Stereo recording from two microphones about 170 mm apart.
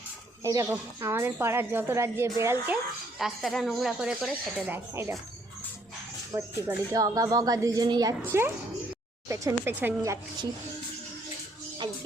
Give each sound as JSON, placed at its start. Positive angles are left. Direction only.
{"t": 0.4, "sound": "a woman's voice", "side_deg": -20}
{"t": 3.2, "sound": "speech", "side_deg": 0}
{"t": 6.3, "sound": "a woman's voice", "side_deg": -20}